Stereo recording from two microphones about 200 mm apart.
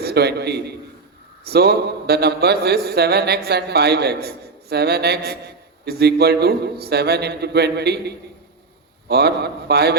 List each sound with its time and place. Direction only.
0.0 s a man's voice: 55° right (ahead or behind)